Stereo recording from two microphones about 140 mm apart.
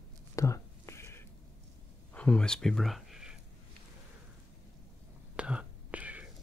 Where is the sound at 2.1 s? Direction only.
5° left (ahead or behind).